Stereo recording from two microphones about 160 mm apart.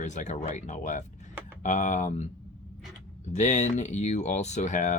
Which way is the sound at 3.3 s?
45° left (ahead or behind).